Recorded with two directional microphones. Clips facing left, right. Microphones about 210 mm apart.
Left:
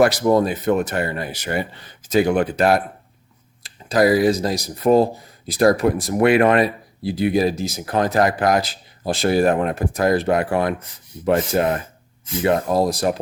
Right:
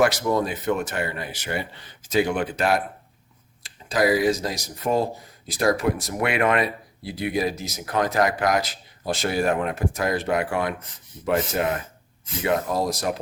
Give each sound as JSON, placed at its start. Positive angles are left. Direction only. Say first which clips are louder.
{"t": 0.0, "sound": "speech", "louder": "left 5 dB", "side_deg": 35}